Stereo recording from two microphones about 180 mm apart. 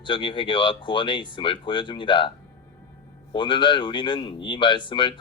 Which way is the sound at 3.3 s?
25° left (ahead or behind).